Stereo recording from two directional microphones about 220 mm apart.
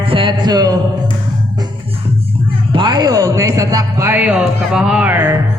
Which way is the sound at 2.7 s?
20° right (ahead or behind).